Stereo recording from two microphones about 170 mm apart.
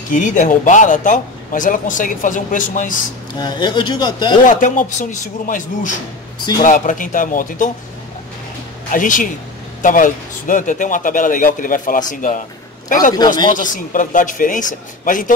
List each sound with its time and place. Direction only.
0.1 s speech: 50° left (ahead or behind)
3.3 s speech: 25° left (ahead or behind)
4.5 s speech: 50° left (ahead or behind)
8.9 s a man's voice: 50° left (ahead or behind)